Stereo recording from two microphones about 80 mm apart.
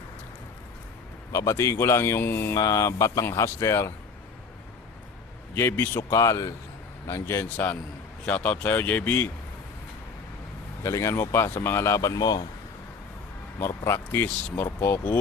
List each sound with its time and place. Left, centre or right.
1.3 s speech: left
2.6 s speech: left
5.5 s speech: left
6.1 s speech: left
7.4 s speech: left
10.8 s speech: left
13.6 s speech: left